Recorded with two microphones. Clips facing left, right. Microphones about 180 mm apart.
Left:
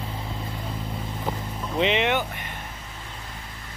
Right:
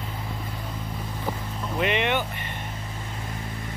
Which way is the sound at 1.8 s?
15° left (ahead or behind).